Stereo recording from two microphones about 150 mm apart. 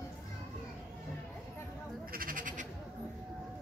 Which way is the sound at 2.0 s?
70° right (ahead or behind).